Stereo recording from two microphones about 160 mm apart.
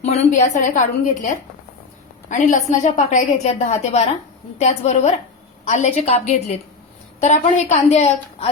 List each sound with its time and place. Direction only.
0.0 s a woman's voice: 45° left (ahead or behind)